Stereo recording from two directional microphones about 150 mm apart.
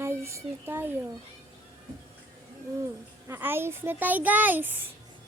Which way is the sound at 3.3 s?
15° right (ahead or behind).